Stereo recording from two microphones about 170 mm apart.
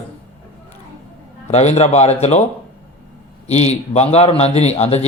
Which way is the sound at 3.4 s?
40° left (ahead or behind).